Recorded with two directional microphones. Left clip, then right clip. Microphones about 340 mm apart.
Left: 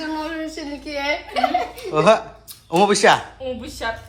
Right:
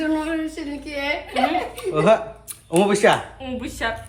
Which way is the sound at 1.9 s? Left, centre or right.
Centre.